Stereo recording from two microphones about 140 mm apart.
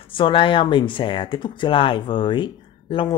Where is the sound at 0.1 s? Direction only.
40° left (ahead or behind).